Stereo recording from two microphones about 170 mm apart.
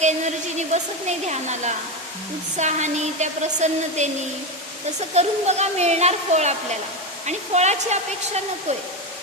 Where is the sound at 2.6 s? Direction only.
45° right (ahead or behind).